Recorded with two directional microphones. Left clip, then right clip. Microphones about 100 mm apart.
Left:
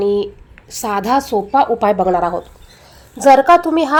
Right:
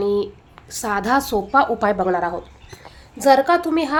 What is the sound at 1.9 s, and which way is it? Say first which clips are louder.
Speech: left 5 dB; 25° left (ahead or behind).